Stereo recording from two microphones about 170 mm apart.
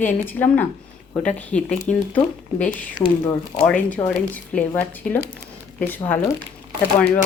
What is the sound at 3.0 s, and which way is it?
Speech, 20° left (ahead or behind).